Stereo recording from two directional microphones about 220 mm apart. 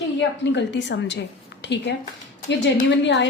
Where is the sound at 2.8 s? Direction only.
55° left (ahead or behind).